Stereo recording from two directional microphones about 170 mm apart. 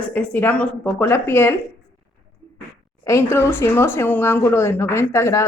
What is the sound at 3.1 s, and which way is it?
Speech, 15° left (ahead or behind).